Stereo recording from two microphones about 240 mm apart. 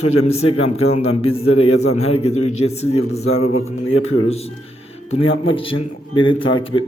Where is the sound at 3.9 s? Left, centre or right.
Left.